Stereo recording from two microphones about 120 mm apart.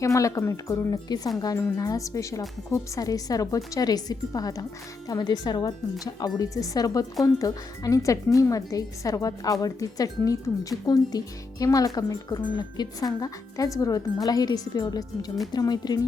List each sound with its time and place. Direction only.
0.0 s a woman's voice: 25° left (ahead or behind)
1.5 s a woman's voice: 20° left (ahead or behind)